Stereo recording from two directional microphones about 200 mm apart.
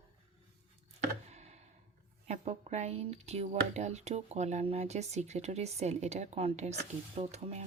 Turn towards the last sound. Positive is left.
turn(degrees=-35)  # may be behind; listen again after turning